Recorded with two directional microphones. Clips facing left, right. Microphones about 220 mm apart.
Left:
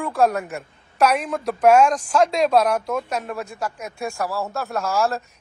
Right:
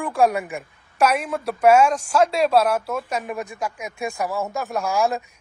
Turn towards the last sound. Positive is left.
turn(degrees=-15)  # may be behind; listen again after turning